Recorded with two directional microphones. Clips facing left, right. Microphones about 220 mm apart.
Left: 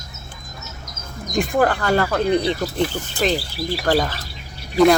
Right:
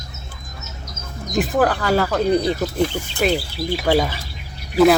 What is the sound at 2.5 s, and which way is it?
Speech, 5° right (ahead or behind).